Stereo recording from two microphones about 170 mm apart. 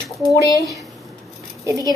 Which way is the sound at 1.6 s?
20° right (ahead or behind).